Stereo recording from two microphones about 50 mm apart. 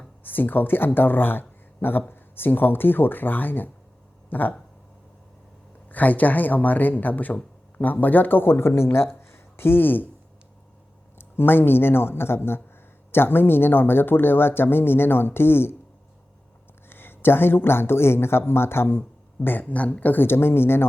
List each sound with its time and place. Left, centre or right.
0.2 s speech: left
5.9 s speech: left
9.3 s a sound: left
11.2 s speech: left
16.9 s speech: left
19.5 s speech: left
20.2 s speech: left